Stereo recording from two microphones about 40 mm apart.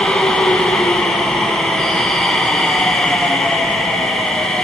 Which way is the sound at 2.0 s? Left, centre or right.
Centre.